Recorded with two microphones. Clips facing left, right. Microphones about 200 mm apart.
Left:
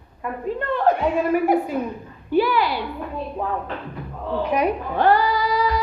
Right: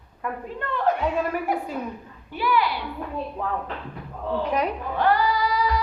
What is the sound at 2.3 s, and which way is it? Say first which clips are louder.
Speech: left 5 dB; 30° left (ahead or behind).